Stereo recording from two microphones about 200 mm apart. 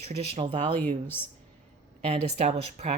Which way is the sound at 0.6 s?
10° left (ahead or behind).